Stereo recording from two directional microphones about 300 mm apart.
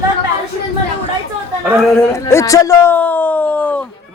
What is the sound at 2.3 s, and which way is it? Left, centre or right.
A man's voice, centre.